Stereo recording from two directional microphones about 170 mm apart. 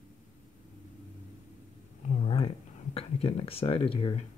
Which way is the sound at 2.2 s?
35° left (ahead or behind).